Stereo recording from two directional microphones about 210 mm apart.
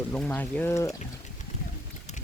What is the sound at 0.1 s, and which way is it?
Speech, 5° left (ahead or behind).